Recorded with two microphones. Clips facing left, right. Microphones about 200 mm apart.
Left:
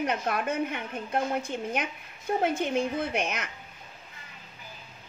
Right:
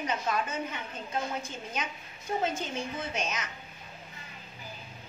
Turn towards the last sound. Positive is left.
turn(degrees=60)  # may be behind; listen again after turning